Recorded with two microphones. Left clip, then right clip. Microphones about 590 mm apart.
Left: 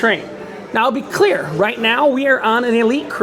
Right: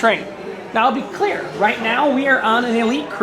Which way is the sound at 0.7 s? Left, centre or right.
Left.